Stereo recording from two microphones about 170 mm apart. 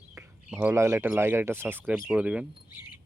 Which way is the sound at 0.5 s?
10° right (ahead or behind).